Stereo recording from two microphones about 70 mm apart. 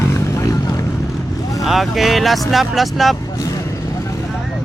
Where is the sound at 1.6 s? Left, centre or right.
Centre.